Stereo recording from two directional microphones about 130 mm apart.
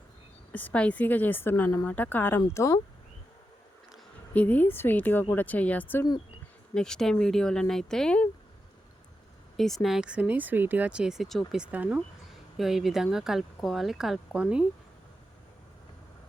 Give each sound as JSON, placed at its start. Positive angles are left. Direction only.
{"t": 0.5, "sound": "speech", "side_deg": 10}
{"t": 4.4, "sound": "speech", "side_deg": 10}
{"t": 9.6, "sound": "speech", "side_deg": 0}